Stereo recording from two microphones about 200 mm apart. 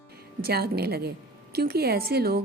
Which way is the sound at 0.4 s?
50° right (ahead or behind).